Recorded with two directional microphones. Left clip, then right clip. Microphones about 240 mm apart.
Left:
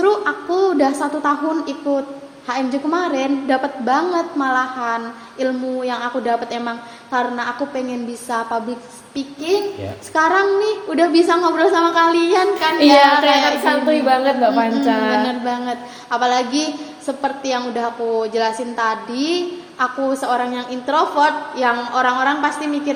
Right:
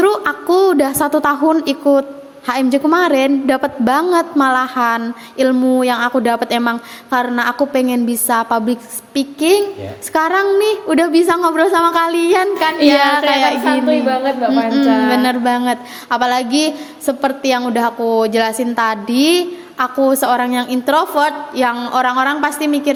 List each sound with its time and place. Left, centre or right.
0.0 s a woman's voice: right
12.5 s a woman's voice: centre
13.0 s a woman's voice: right
13.7 s a woman's voice: centre
15.1 s a woman's voice: right